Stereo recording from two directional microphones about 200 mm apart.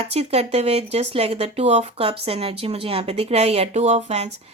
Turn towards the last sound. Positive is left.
turn(degrees=-35)  # may be behind; listen again after turning